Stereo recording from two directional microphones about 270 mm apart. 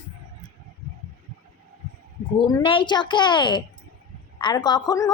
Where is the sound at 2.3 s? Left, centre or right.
Centre.